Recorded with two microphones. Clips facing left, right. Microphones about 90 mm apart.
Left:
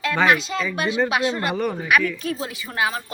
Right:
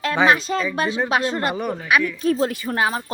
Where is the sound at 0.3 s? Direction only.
40° right (ahead or behind).